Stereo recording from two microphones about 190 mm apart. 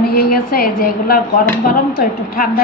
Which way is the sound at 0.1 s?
50° left (ahead or behind).